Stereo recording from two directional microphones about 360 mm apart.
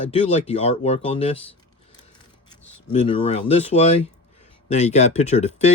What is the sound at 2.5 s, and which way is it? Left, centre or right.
Speech, centre.